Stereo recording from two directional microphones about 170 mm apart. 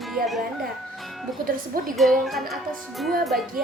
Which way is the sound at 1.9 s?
Centre (ahead or behind).